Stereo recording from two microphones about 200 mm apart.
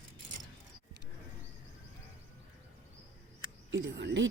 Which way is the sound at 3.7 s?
65° right (ahead or behind).